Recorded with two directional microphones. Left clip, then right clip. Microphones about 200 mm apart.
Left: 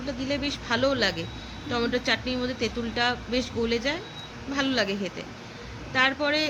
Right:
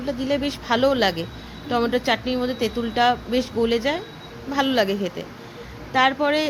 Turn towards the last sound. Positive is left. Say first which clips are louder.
# right 5 dB
turn(degrees=-20)  # may be behind; listen again after turning